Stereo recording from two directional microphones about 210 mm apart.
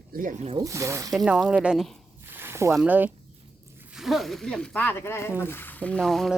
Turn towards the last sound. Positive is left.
turn(degrees=0)  # may be behind; listen again after turning